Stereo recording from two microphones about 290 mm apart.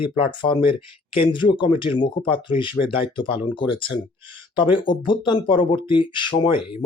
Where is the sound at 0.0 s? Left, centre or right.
Centre.